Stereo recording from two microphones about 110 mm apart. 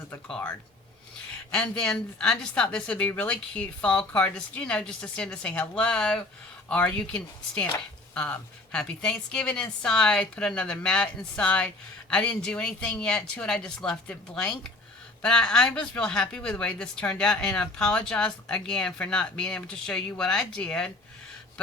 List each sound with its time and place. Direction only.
0.3 s speech: 10° left (ahead or behind)